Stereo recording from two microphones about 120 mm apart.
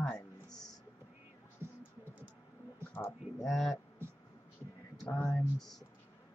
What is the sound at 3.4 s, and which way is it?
Speech, centre (ahead or behind).